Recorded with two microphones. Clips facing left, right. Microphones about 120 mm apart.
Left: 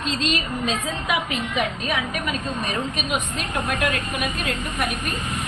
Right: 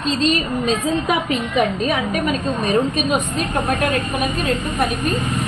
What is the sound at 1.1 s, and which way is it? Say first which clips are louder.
A woman's voice: right 5 dB; 40° right (ahead or behind).